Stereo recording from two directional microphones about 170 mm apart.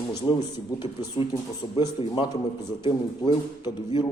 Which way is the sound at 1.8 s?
30° left (ahead or behind).